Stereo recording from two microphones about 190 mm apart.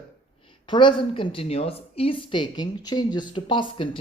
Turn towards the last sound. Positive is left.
turn(degrees=25)  # may be behind; listen again after turning